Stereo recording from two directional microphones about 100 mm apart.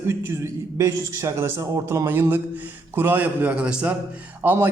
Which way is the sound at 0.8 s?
30° right (ahead or behind).